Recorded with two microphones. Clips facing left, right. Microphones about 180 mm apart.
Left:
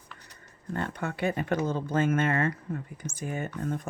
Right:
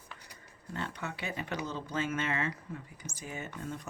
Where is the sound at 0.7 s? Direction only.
50° left (ahead or behind).